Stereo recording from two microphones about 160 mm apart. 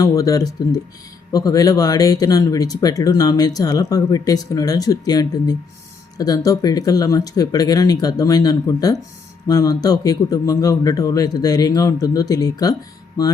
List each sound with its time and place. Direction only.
0.0 s speech: 20° left (ahead or behind)